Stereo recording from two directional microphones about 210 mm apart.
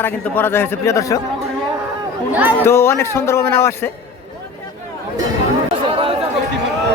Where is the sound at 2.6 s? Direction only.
10° left (ahead or behind).